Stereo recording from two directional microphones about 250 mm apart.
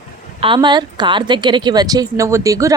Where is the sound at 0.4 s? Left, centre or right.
Centre.